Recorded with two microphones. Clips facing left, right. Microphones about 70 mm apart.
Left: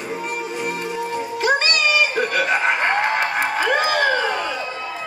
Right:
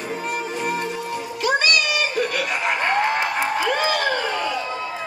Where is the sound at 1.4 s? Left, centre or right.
Left.